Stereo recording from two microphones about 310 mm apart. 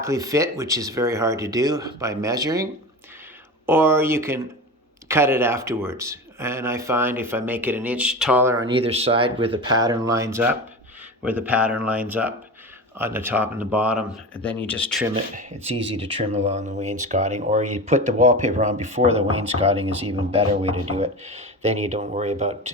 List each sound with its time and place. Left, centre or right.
0.0 s speech: centre
3.7 s speech: centre
15.1 s speech: right